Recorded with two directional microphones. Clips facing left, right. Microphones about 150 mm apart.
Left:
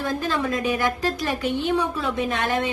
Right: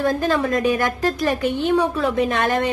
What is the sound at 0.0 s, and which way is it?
A woman's voice, 50° right (ahead or behind).